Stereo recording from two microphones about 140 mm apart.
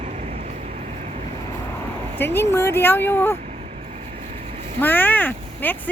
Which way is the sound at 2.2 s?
15° left (ahead or behind).